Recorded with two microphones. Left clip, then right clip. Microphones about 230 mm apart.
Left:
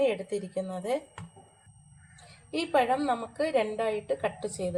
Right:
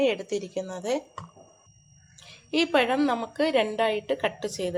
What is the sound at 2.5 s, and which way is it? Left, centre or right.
A woman's voice, right.